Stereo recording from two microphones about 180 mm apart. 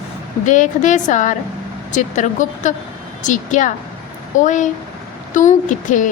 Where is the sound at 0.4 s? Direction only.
45° left (ahead or behind).